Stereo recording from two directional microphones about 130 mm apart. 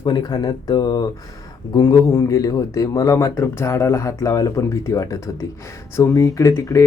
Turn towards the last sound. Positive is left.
turn(degrees=25)  # may be behind; listen again after turning